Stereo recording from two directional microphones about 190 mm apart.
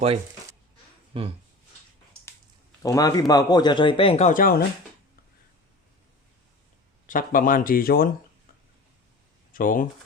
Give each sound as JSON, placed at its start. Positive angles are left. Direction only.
{"t": 1.1, "sound": "speech", "side_deg": -30}
{"t": 2.8, "sound": "speech", "side_deg": 20}
{"t": 7.1, "sound": "speech", "side_deg": 45}
{"t": 9.5, "sound": "speech", "side_deg": 45}